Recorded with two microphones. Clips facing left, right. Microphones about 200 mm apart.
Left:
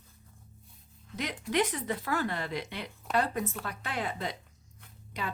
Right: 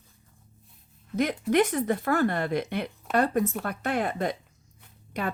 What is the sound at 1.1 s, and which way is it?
Speech, 50° right (ahead or behind).